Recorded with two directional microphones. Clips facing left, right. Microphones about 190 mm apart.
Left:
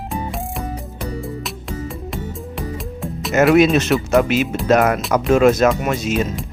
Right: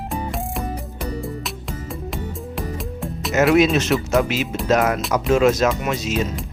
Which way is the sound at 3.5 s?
55° left (ahead or behind).